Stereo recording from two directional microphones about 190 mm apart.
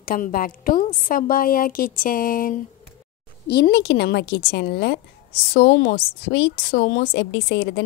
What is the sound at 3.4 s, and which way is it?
A woman's voice, 60° left (ahead or behind).